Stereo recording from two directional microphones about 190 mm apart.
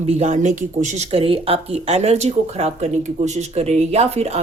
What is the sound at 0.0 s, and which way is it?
Speech, 35° right (ahead or behind).